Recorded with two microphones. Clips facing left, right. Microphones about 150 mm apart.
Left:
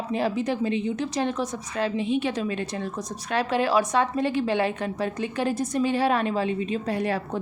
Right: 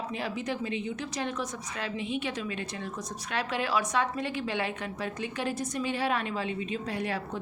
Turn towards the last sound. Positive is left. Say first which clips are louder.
# left 6 dB
turn(degrees=40)  # may be behind; listen again after turning